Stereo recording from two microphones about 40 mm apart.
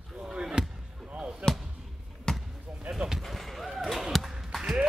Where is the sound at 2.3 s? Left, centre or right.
Centre.